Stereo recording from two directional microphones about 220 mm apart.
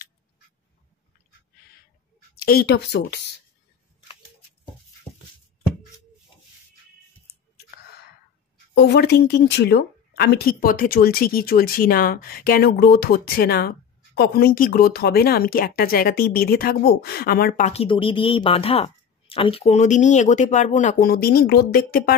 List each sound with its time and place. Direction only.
2.3 s speech: 45° left (ahead or behind)
8.7 s speech: 50° left (ahead or behind)